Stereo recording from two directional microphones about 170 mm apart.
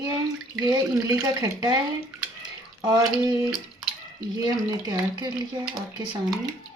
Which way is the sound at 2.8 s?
20° right (ahead or behind).